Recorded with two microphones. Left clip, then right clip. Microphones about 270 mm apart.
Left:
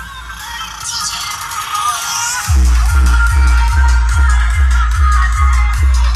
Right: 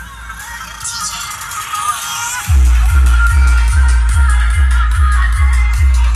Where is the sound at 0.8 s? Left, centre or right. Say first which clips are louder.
Left 2 dB; left.